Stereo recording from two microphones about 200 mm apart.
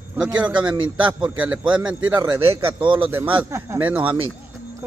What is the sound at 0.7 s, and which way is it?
A man's voice, 20° right (ahead or behind).